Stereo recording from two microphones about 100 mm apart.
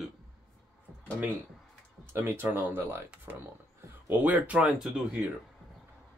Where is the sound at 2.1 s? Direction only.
20° right (ahead or behind); by 5.2 s 5° right (ahead or behind).